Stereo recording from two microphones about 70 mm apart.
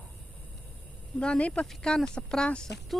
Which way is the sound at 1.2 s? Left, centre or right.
Centre.